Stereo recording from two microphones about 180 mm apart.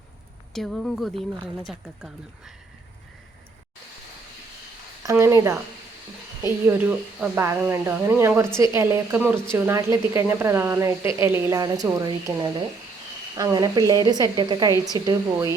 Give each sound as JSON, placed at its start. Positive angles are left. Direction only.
{"t": 0.5, "sound": "speech", "side_deg": 0}
{"t": 5.0, "sound": "a woman's voice", "side_deg": -15}